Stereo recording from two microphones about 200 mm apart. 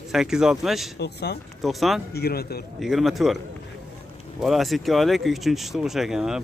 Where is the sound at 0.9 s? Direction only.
55° left (ahead or behind).